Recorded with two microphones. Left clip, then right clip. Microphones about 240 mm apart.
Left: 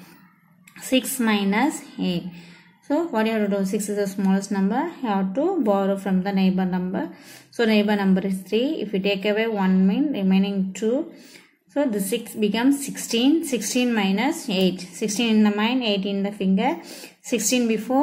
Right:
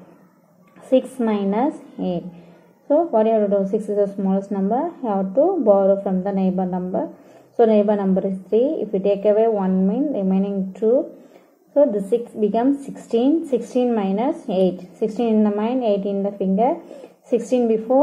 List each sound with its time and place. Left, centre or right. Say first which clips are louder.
0.9 s a woman's voice: right 3 dB; left